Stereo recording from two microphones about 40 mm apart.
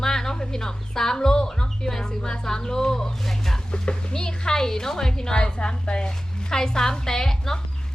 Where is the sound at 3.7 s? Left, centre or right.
Left.